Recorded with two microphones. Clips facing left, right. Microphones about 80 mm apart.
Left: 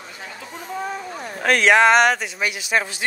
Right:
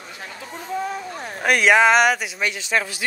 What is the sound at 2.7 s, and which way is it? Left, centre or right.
Speech, left.